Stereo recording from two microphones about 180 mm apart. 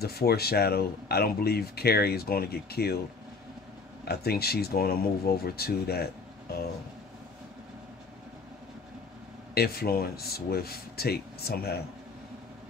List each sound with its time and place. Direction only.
0.0 s speech: 60° left (ahead or behind)
4.0 s speech: 60° left (ahead or behind)
9.5 s speech: 60° left (ahead or behind)